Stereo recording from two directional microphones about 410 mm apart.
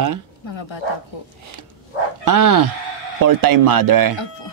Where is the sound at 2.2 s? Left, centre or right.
Right.